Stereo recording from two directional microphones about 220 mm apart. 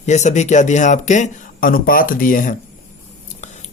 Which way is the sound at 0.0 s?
30° left (ahead or behind).